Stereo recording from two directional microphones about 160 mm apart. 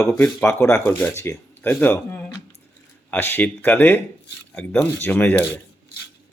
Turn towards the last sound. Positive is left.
turn(degrees=10)  # may be behind; listen again after turning